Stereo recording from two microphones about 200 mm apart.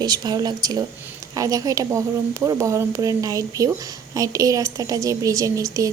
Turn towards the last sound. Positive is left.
turn(degrees=-15)  # may be behind; listen again after turning